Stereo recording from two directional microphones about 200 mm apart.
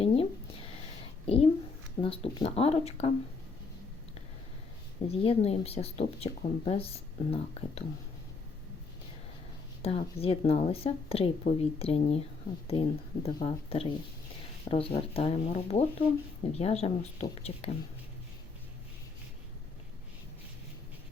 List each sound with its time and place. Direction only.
0.0 s a sound: 30° left (ahead or behind)
2.0 s speech: 30° left (ahead or behind)
5.0 s speech: 30° left (ahead or behind)
9.8 s speech: 30° left (ahead or behind)